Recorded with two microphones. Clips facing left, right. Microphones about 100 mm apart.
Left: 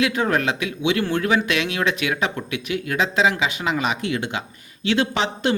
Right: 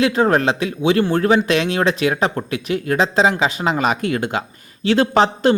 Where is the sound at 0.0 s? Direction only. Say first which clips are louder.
Right 5 dB; 35° right (ahead or behind).